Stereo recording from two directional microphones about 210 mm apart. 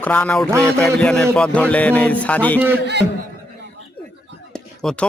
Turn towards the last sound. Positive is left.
turn(degrees=5)  # may be behind; listen again after turning